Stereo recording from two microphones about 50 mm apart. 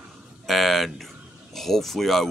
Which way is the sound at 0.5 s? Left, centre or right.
Centre.